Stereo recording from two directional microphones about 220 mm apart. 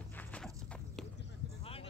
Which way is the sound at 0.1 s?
5° left (ahead or behind).